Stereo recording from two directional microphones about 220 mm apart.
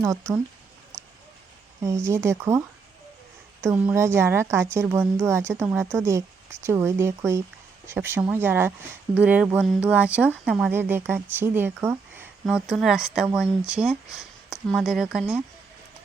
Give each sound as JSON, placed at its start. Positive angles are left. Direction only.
{"t": 0.0, "sound": "speech", "side_deg": -15}
{"t": 1.8, "sound": "speech", "side_deg": -15}
{"t": 3.6, "sound": "speech", "side_deg": -10}